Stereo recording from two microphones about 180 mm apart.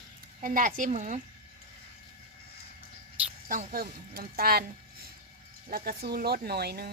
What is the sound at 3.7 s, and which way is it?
Speech, 55° right (ahead or behind).